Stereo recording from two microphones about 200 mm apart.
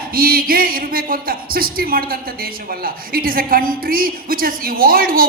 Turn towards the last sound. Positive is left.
turn(degrees=-45)  # may be behind; listen again after turning